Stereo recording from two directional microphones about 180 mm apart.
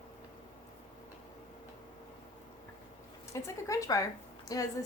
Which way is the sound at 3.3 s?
15° left (ahead or behind).